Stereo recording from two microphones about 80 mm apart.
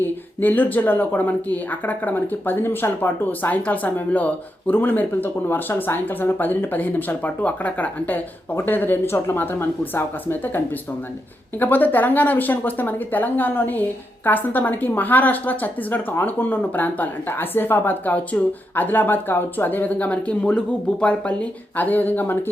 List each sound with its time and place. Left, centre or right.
0.0 s speech: left
11.6 s speech: left